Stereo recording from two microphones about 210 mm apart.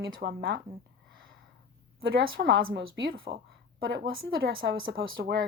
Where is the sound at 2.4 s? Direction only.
50° right (ahead or behind).